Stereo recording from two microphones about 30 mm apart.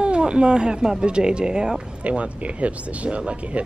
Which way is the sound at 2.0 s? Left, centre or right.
Right.